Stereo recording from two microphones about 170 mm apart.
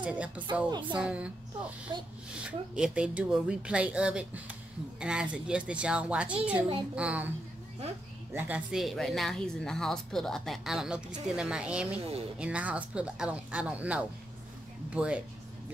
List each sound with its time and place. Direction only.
0.0 s speech: 5° right (ahead or behind)
0.7 s music: 30° right (ahead or behind)
0.9 s a woman's voice: 5° right (ahead or behind)
1.9 s music: 25° right (ahead or behind)
2.3 s a woman's voice: 5° right (ahead or behind)
8.4 s a woman's voice: 10° right (ahead or behind)